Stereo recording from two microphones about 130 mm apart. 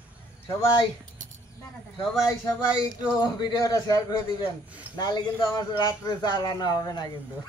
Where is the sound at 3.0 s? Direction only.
30° left (ahead or behind).